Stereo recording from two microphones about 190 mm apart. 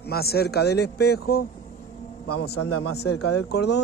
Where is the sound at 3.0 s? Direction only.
60° left (ahead or behind).